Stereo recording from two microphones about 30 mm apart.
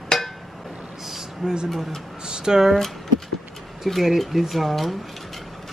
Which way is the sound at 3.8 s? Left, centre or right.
Centre.